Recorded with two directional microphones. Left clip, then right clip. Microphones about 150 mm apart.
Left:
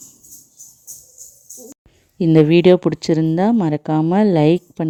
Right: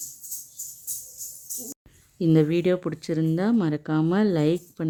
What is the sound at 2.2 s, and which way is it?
Speech, 35° left (ahead or behind).